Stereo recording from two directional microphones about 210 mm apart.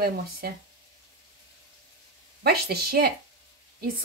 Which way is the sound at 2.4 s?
50° right (ahead or behind).